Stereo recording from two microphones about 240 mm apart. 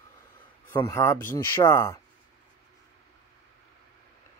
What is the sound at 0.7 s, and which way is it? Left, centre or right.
Speech, centre.